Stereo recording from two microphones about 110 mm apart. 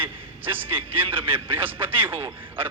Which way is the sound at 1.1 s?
55° right (ahead or behind).